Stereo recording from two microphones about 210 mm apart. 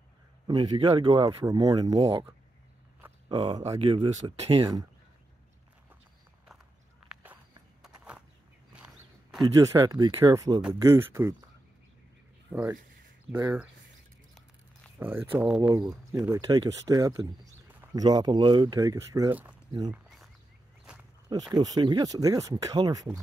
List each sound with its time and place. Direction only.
0.5 s speech: 20° right (ahead or behind)
3.3 s speech: 20° right (ahead or behind)
7.1 s walk: centre (ahead or behind)
8.7 s a sound: 5° right (ahead or behind)
9.4 s speech: 15° right (ahead or behind)
13.3 s speech: 10° right (ahead or behind)
15.0 s speech: 10° right (ahead or behind)
15.7 s speech: 20° right (ahead or behind)
19.9 s a sound: centre (ahead or behind)
20.9 s walk: 5° right (ahead or behind)
21.5 s speech: 20° right (ahead or behind)